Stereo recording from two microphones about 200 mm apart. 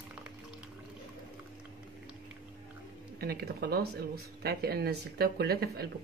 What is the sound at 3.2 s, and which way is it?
Speech, 50° right (ahead or behind).